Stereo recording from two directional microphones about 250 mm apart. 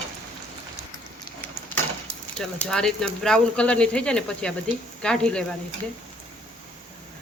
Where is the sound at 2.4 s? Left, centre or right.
Centre.